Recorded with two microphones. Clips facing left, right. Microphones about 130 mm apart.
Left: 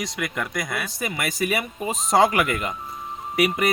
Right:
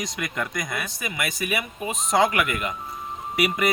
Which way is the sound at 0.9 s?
35° left (ahead or behind).